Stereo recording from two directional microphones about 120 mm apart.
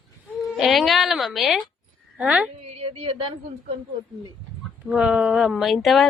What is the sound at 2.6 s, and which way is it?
Speech, 60° right (ahead or behind).